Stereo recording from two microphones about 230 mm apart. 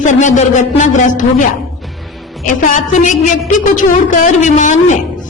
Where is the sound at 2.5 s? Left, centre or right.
Left.